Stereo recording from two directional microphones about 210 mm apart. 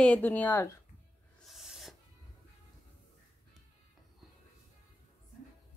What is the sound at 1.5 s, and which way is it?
Owl, centre (ahead or behind).